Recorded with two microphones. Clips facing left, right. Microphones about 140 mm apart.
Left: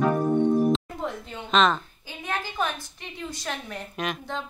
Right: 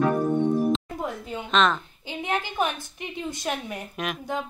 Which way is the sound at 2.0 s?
20° right (ahead or behind).